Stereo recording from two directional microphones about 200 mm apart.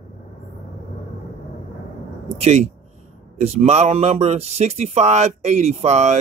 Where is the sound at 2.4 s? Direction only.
30° right (ahead or behind).